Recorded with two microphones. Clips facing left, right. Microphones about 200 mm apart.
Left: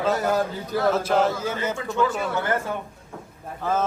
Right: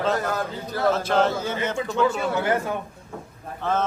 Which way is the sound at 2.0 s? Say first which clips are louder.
Right 2 dB; 20° right (ahead or behind).